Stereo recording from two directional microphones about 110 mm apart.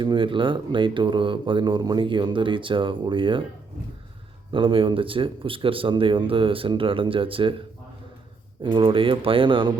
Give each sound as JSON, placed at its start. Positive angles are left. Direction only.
{"t": 0.0, "sound": "speech", "side_deg": -45}
{"t": 4.5, "sound": "speech", "side_deg": -50}
{"t": 8.6, "sound": "speech", "side_deg": -50}